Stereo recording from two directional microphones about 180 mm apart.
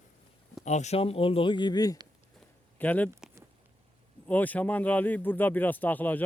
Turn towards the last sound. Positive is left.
turn(degrees=10)  # may be behind; listen again after turning